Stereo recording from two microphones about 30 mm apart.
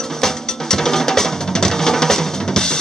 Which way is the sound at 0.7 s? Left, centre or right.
Centre.